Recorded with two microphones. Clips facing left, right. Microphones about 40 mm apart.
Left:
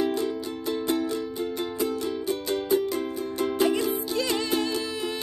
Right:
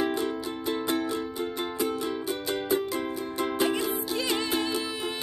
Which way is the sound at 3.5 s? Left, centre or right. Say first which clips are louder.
Left 3 dB; centre.